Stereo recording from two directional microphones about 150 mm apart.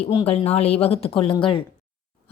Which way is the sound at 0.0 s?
40° left (ahead or behind).